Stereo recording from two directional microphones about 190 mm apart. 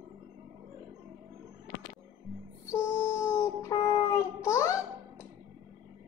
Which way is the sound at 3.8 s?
15° left (ahead or behind).